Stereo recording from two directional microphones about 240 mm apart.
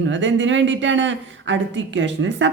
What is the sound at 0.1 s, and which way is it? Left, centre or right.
Speech, right.